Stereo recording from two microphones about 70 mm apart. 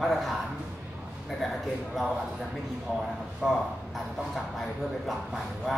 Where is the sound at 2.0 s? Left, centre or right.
Centre.